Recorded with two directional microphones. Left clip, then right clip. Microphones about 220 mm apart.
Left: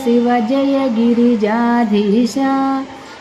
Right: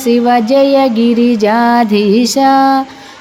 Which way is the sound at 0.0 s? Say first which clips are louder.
Right 4 dB; 45° right (ahead or behind).